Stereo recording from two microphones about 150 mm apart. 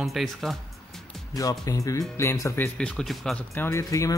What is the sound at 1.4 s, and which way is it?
Speech, 25° left (ahead or behind).